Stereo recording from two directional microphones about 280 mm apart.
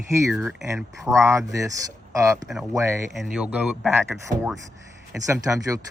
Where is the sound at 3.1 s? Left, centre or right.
Centre.